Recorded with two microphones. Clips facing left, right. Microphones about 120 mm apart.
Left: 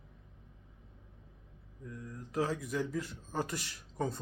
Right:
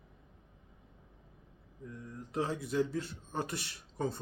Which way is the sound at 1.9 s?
25° right (ahead or behind).